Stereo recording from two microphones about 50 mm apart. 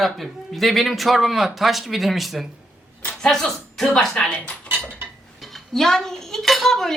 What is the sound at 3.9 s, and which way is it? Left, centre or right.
Speech, centre.